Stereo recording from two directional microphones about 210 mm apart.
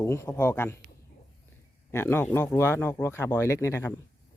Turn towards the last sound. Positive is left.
turn(degrees=10)  # may be behind; listen again after turning